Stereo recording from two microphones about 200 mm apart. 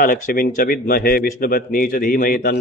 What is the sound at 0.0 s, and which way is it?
Speech, 45° left (ahead or behind).